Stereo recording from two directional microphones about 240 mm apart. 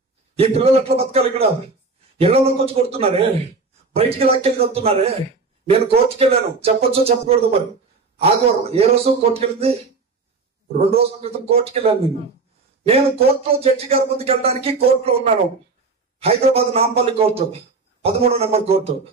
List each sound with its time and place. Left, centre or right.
0.4 s speech: right